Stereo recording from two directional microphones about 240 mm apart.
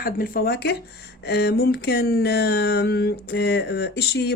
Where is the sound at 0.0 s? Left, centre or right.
Left.